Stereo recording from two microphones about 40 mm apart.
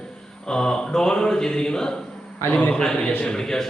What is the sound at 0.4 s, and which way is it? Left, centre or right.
Speech, centre.